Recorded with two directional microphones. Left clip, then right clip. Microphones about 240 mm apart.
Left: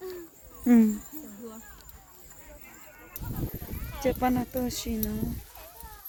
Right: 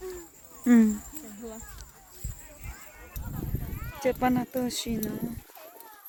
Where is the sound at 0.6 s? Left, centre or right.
Centre.